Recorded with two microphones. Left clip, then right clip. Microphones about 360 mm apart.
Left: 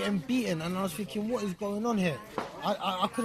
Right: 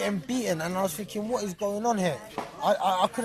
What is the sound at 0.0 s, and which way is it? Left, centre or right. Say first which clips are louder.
Speech: right 2 dB; centre.